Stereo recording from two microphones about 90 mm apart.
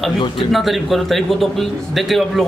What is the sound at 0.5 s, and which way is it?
A man's voice, centre (ahead or behind).